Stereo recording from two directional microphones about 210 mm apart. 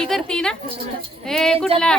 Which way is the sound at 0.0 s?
5° left (ahead or behind).